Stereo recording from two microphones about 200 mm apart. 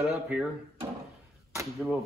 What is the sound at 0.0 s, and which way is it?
Speech, 5° right (ahead or behind).